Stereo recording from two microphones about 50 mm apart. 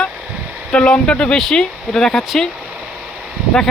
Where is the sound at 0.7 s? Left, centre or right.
Left.